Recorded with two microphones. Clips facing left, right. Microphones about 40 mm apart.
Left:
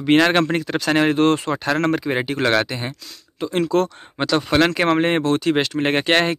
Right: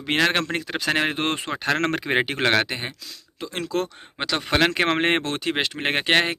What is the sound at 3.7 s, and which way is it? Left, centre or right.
Speech, centre.